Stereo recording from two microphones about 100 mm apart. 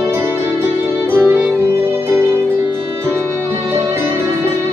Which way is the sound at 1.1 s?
20° right (ahead or behind).